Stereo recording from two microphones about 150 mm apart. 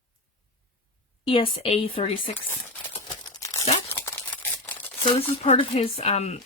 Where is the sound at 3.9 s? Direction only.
15° left (ahead or behind).